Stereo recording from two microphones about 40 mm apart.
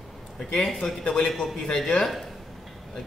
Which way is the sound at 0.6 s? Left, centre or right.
Centre.